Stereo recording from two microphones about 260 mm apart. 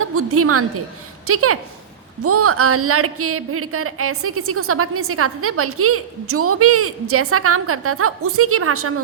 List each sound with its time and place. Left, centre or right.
0.0 s a woman's voice: right